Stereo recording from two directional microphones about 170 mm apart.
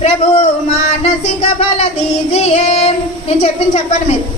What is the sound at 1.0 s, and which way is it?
A woman's voice, 40° left (ahead or behind).